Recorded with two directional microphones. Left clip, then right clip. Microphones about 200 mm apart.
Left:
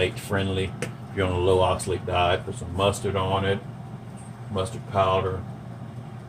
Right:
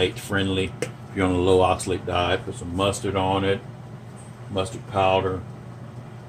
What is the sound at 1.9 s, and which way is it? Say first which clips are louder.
Speech: even; 35° right (ahead or behind).